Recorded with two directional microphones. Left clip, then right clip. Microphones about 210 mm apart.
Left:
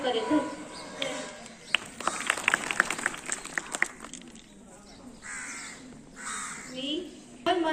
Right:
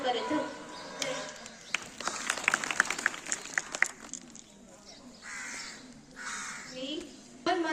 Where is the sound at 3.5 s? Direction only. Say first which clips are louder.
Even; 50° left (ahead or behind).